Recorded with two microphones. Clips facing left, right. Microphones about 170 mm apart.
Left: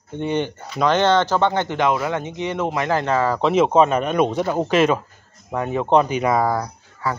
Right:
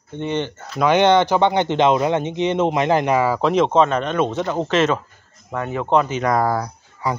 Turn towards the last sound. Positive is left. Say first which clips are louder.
# right 2 dB
turn(degrees=-15)  # may be behind; listen again after turning